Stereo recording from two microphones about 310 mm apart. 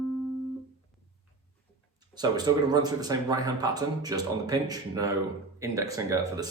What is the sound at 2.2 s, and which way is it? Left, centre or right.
Speech, centre.